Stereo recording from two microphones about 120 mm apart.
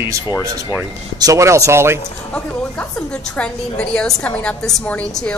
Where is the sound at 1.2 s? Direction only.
25° right (ahead or behind).